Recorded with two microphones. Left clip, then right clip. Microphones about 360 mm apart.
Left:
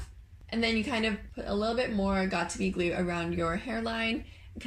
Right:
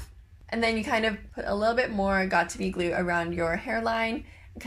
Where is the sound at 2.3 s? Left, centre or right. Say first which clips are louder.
Right 6 dB; right.